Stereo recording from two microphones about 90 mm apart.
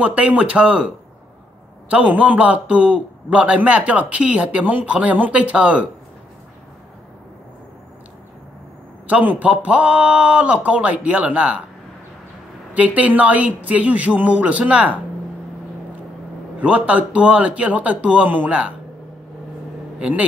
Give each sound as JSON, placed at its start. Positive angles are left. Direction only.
{"t": 0.0, "sound": "a man's voice", "side_deg": -15}
{"t": 9.0, "sound": "a man's voice", "side_deg": -15}
{"t": 12.7, "sound": "a man's voice", "side_deg": -15}
{"t": 16.5, "sound": "a man's voice", "side_deg": -15}
{"t": 20.0, "sound": "a man's voice", "side_deg": -15}